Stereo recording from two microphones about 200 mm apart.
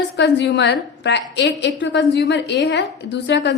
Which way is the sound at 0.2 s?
60° left (ahead or behind).